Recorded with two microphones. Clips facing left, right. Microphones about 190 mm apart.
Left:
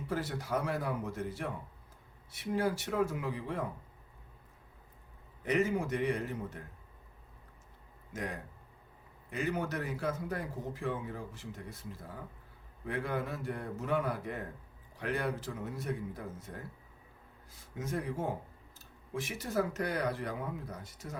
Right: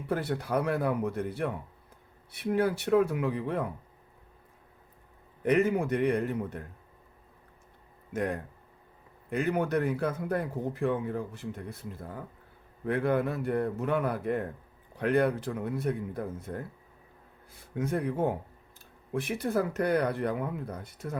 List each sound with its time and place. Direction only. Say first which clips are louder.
0.1 s a man's voice: right 6 dB; 60° right (ahead or behind)
5.4 s a man's voice: right 6 dB; 60° right (ahead or behind)
8.1 s a man's voice: right 8 dB; 55° right (ahead or behind)
17.7 s a man's voice: right 7 dB; 60° right (ahead or behind)